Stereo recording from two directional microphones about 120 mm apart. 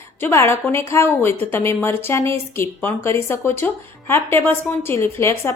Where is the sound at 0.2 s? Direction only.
20° left (ahead or behind).